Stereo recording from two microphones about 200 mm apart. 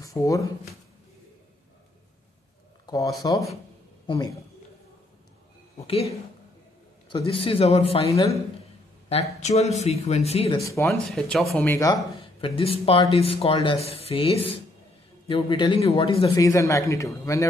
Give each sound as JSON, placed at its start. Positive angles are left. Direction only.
{"t": 0.0, "sound": "speech", "side_deg": 15}
{"t": 2.9, "sound": "speech", "side_deg": 15}
{"t": 5.8, "sound": "speech", "side_deg": 30}
{"t": 7.1, "sound": "speech", "side_deg": 25}
{"t": 9.4, "sound": "speech", "side_deg": 35}
{"t": 10.6, "sound": "speech", "side_deg": 15}
{"t": 11.1, "sound": "speech", "side_deg": 0}
{"t": 12.2, "sound": "speech", "side_deg": 25}
{"t": 16.3, "sound": "speech", "side_deg": 15}